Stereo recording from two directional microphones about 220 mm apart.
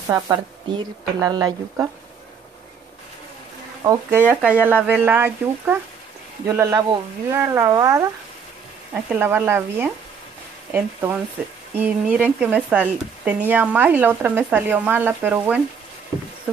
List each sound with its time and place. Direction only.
0.1 s speech: 15° right (ahead or behind)
3.8 s speech: 15° right (ahead or behind)
9.1 s speech: 10° right (ahead or behind)